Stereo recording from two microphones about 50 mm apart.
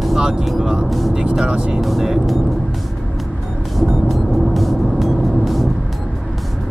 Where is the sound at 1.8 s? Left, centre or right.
Centre.